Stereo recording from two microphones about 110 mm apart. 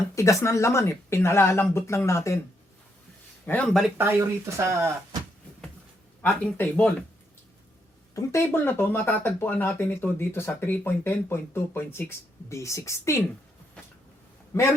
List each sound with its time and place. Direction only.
0.2 s speech: 25° left (ahead or behind)
3.4 s speech: 15° left (ahead or behind)
3.9 s speech: 20° right (ahead or behind)
6.6 s speech: 15° left (ahead or behind)
8.1 s speech: 25° left (ahead or behind)